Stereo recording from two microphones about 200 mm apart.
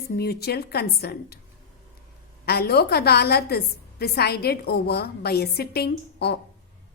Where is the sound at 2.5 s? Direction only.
50° left (ahead or behind).